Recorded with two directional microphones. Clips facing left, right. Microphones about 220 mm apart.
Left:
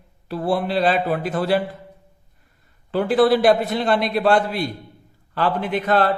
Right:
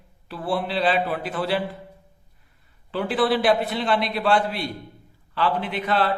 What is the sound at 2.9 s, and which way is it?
A man's voice, 45° left (ahead or behind).